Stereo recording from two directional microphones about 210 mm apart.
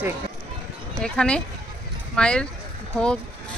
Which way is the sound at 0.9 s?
5° left (ahead or behind).